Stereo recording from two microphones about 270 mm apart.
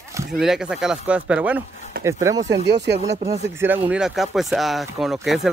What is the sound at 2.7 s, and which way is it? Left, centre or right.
Speech, right.